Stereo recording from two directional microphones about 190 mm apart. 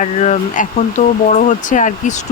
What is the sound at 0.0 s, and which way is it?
Speech, 40° left (ahead or behind).